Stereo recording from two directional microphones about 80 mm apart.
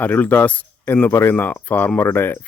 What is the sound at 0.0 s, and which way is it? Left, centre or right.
Speech, left.